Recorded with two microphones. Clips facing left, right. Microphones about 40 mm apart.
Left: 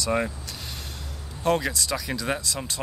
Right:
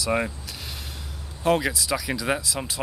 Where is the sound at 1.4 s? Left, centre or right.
Centre.